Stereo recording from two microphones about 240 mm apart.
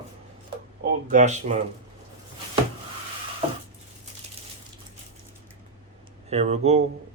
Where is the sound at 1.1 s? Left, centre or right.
Right.